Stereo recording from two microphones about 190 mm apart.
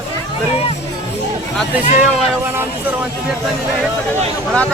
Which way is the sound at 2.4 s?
10° right (ahead or behind).